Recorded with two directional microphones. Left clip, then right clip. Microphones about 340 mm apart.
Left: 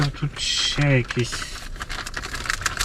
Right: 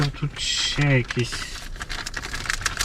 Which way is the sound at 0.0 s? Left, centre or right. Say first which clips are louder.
Left 1 dB; centre.